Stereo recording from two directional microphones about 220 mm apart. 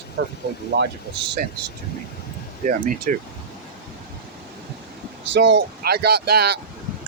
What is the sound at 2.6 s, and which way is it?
Speech, 35° right (ahead or behind).